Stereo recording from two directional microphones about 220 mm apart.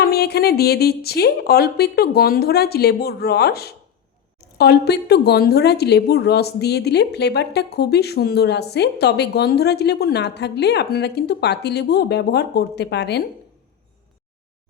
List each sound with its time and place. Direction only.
0.0 s a woman's voice: 45° left (ahead or behind)